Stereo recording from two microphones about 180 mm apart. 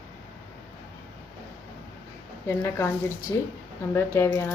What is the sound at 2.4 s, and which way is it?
Speech, 15° left (ahead or behind).